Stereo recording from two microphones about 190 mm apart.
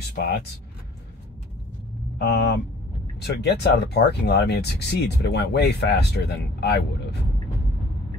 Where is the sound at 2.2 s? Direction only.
60° left (ahead or behind).